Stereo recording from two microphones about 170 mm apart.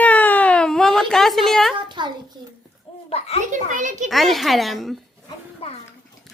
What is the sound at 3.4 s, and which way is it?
Speech, 50° right (ahead or behind).